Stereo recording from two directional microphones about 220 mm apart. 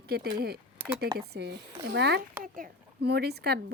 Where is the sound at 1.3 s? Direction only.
50° right (ahead or behind).